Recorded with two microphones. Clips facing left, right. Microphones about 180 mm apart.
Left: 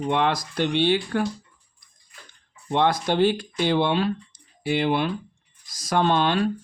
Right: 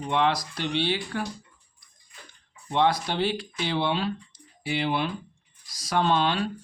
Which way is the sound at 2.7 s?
50° left (ahead or behind).